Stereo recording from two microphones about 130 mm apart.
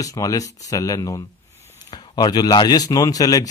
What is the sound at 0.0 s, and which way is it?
Speech, 25° left (ahead or behind).